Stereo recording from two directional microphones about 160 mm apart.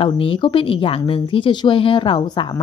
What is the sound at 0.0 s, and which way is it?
A woman's voice, 35° left (ahead or behind).